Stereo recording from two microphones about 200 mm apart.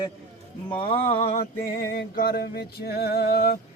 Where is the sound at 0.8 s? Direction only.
25° left (ahead or behind).